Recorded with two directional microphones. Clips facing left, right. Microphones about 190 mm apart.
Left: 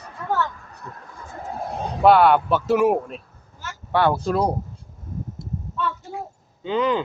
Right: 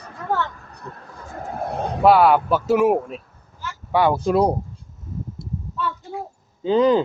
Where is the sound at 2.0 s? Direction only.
5° right (ahead or behind).